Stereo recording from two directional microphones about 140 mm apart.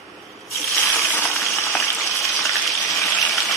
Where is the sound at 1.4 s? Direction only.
Centre (ahead or behind).